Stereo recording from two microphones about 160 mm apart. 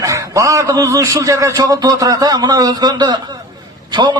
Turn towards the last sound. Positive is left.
turn(degrees=-30)  # may be behind; listen again after turning